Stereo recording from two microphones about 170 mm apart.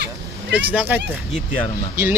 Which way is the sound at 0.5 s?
10° right (ahead or behind).